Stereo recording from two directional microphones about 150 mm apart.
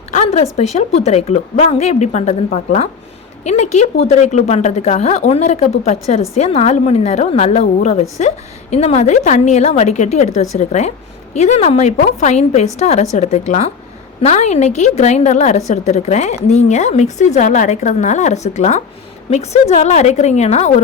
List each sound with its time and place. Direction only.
0.1 s a woman's voice: 50° left (ahead or behind)